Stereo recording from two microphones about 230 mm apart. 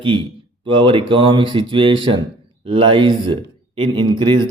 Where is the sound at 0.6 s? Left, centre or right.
Right.